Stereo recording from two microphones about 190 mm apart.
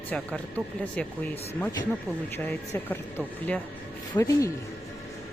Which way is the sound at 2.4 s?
10° left (ahead or behind).